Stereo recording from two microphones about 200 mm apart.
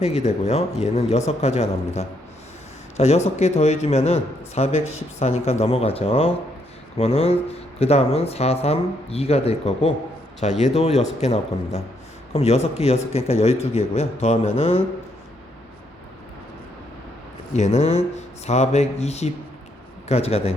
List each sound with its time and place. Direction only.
0.0 s a man's voice: 35° left (ahead or behind)
17.5 s a man's voice: 35° left (ahead or behind)